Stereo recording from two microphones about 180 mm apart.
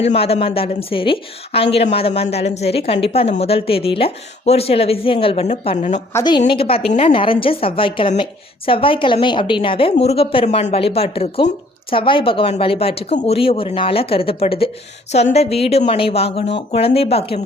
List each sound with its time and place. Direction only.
0.0 s a woman's voice: 35° left (ahead or behind)
6.1 s a woman's voice: 25° left (ahead or behind)